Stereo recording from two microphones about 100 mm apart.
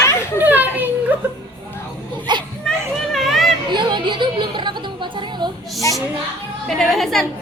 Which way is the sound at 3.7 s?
50° right (ahead or behind).